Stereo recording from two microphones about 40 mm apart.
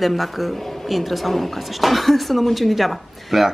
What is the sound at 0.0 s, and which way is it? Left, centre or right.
Speech, centre.